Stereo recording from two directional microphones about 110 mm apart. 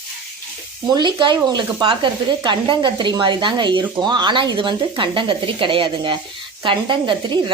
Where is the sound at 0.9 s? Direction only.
40° right (ahead or behind).